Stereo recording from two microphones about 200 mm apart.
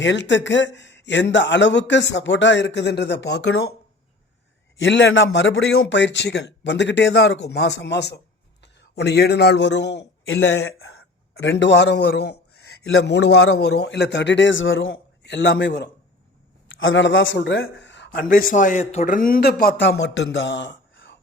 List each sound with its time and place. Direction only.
0.0 s speech: 65° left (ahead or behind)
4.8 s a man's voice: 65° left (ahead or behind); by 11.0 s 90° left
11.4 s speech: 60° left (ahead or behind)
13.6 s speech: 55° left (ahead or behind); by 14.9 s 75° left (ahead or behind)
15.2 s speech: 60° left (ahead or behind)
16.6 s speech: 75° left (ahead or behind)
18.1 s a man's voice: 45° left (ahead or behind); by 21.2 s 65° left (ahead or behind)